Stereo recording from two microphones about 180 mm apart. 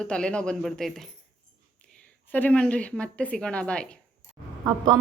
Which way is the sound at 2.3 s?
10° left (ahead or behind).